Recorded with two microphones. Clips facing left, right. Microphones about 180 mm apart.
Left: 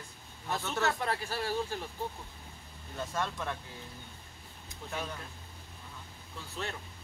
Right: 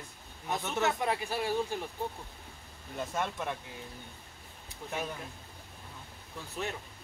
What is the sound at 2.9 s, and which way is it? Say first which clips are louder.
Speech: right 1 dB; 20° right (ahead or behind).